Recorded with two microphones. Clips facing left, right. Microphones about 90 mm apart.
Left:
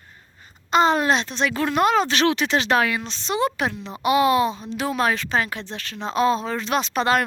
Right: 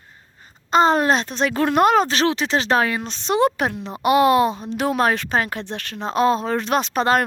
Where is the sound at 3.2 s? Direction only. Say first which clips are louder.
Right 5 dB; 50° right (ahead or behind).